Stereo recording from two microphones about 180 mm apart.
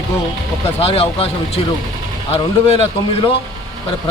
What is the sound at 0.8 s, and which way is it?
Speech, 35° left (ahead or behind).